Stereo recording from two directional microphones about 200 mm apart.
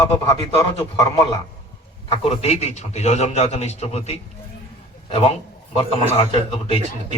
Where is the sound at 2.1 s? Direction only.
30° left (ahead or behind).